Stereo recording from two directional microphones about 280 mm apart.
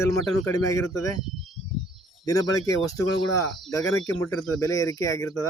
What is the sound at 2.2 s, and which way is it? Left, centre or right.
Speech, centre.